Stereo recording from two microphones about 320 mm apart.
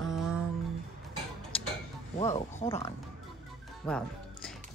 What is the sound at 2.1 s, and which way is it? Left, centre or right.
Speech, centre.